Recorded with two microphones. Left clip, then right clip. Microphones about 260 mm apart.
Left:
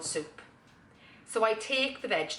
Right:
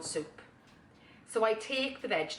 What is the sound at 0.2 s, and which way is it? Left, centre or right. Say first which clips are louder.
Speech: left 1 dB; centre.